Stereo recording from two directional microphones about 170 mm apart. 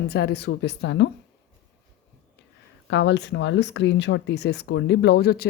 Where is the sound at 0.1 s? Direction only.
75° left (ahead or behind); by 1.1 s 90° left.